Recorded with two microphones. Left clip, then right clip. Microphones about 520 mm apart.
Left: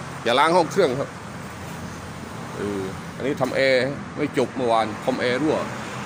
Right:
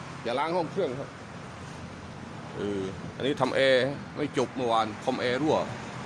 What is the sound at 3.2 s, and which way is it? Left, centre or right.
Speech, right.